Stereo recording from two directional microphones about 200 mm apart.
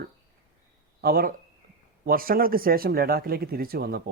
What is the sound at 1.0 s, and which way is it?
Speech, 50° right (ahead or behind).